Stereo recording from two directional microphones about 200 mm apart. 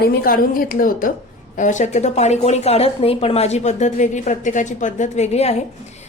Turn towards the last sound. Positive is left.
turn(degrees=35)  # may be behind; listen again after turning